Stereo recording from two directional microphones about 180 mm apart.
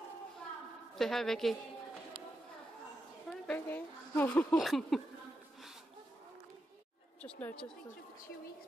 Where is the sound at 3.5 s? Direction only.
10° left (ahead or behind).